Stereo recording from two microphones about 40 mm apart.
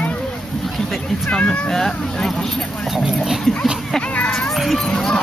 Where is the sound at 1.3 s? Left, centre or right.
Left.